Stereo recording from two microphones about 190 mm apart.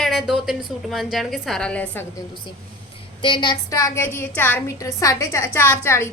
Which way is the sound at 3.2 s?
25° left (ahead or behind).